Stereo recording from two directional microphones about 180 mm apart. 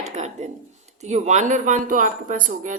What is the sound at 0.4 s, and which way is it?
A woman's voice, 40° right (ahead or behind).